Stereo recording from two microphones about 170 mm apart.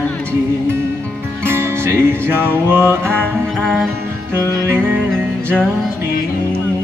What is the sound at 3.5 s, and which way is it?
Music, centre (ahead or behind).